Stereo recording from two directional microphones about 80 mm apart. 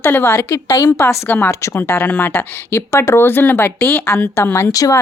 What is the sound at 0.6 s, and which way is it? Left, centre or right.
Speech, left.